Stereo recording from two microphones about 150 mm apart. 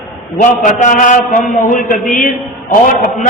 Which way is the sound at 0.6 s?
60° left (ahead or behind).